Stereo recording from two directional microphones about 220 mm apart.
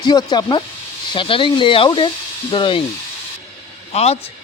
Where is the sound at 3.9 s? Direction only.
30° left (ahead or behind).